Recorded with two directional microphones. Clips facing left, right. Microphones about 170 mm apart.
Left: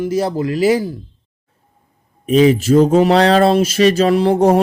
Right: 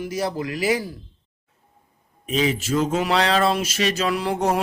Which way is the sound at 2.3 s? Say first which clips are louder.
Left 11 dB; 45° left (ahead or behind).